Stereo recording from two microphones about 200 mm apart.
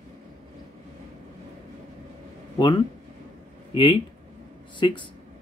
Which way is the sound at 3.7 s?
25° left (ahead or behind).